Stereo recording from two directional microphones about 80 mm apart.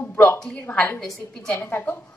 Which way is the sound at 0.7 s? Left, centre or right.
Left.